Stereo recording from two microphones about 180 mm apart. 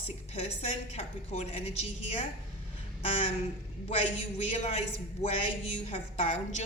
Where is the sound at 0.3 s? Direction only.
35° left (ahead or behind).